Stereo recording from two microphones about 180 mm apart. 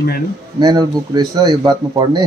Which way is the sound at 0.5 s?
25° right (ahead or behind).